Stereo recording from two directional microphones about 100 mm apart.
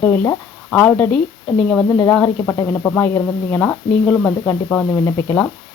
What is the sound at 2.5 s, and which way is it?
Speech, 20° left (ahead or behind).